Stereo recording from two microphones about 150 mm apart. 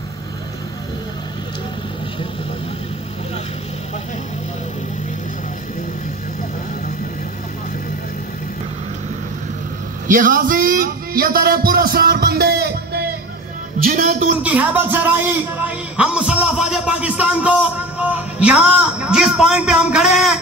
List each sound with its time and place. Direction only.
10.0 s speech: 65° right (ahead or behind); by 13.1 s 90° right
13.8 s a man's voice: 65° right (ahead or behind)
14.4 s a man's voice: 10° right (ahead or behind)